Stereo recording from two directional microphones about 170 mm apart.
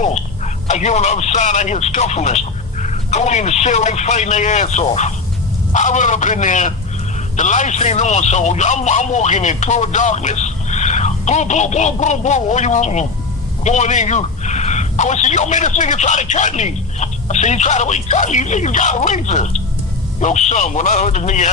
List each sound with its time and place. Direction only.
0.7 s speech: 45° left (ahead or behind)